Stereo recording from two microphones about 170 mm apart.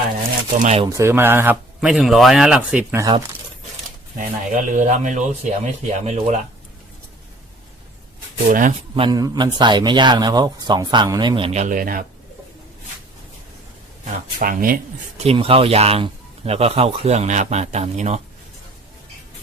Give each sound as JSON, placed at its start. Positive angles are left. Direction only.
{"t": 0.9, "sound": "speech", "side_deg": -15}
{"t": 4.2, "sound": "speech", "side_deg": -50}
{"t": 8.4, "sound": "speech", "side_deg": -55}
{"t": 9.0, "sound": "speech", "side_deg": -25}
{"t": 14.3, "sound": "speech", "side_deg": -50}
{"t": 15.2, "sound": "speech", "side_deg": -35}